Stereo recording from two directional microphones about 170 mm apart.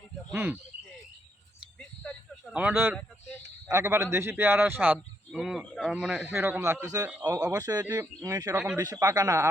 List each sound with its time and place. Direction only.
0.3 s speech: 15° right (ahead or behind)
1.8 s a sound: 5° left (ahead or behind)
2.6 s a man's voice: 10° right (ahead or behind)
8.5 s speech: 5° right (ahead or behind)
8.8 s a man's voice: 20° right (ahead or behind)